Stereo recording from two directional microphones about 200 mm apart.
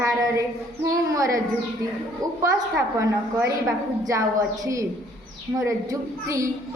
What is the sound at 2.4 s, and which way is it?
A woman's voice, 15° right (ahead or behind).